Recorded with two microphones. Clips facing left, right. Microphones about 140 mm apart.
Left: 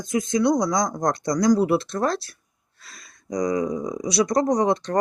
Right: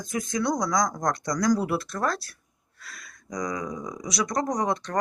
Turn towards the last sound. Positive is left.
turn(degrees=25)  # may be behind; listen again after turning